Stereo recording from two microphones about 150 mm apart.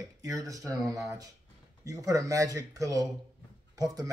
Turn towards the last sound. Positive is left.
turn(degrees=-25)  # may be behind; listen again after turning